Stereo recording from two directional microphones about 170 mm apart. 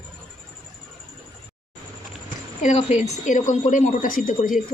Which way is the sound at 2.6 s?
40° left (ahead or behind).